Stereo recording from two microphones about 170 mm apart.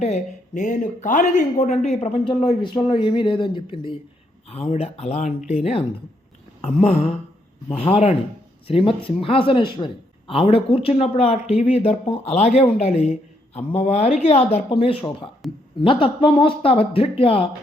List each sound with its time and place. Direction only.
0.0 s a man's voice: 45° left (ahead or behind)
6.6 s a man's voice: 35° left (ahead or behind)